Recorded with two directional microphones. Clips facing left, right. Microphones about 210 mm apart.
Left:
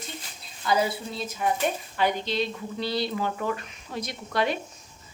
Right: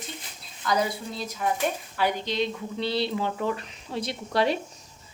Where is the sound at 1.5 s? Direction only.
10° right (ahead or behind); by 4.5 s 35° right (ahead or behind).